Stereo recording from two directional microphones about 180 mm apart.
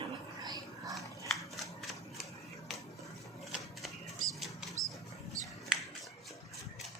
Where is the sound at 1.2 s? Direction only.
Centre (ahead or behind).